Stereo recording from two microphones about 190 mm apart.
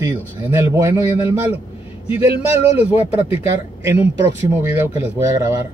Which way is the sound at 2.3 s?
30° left (ahead or behind).